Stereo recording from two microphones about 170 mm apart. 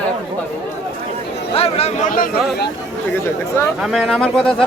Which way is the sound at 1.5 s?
35° left (ahead or behind).